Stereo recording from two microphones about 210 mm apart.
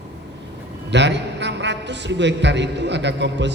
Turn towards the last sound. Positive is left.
turn(degrees=-55)  # may be behind; listen again after turning